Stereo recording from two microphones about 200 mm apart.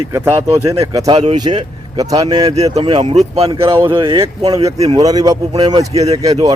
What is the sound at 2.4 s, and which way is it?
Speech, 30° right (ahead or behind).